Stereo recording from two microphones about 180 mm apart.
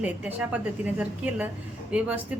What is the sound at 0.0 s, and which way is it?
A woman's voice, 10° right (ahead or behind).